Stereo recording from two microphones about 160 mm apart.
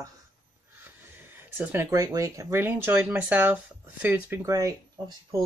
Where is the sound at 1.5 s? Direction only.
10° right (ahead or behind).